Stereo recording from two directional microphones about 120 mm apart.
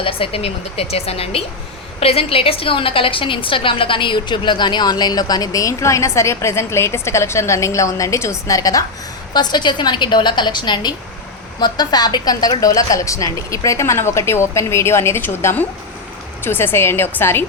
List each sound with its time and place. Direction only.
0.0 s a woman's voice: 50° left (ahead or behind); by 17.4 s 20° left (ahead or behind)